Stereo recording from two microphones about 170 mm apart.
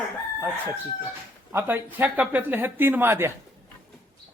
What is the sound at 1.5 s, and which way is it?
A woman's voice, 10° right (ahead or behind).